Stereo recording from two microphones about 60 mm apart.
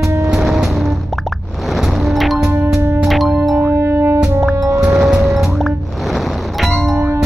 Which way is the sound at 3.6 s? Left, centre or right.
Right.